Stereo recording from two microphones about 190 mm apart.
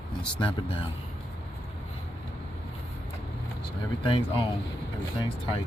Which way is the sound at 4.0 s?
25° left (ahead or behind).